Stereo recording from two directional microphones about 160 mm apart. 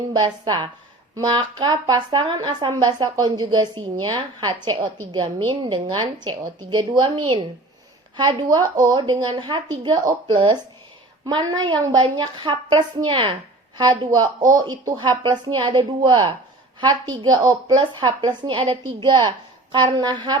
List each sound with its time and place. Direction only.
0.1 s a woman's voice: 25° right (ahead or behind)